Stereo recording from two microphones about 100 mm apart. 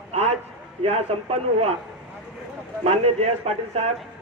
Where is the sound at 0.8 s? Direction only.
90° right.